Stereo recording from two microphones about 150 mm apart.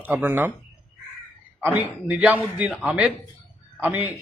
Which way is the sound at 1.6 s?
15° right (ahead or behind).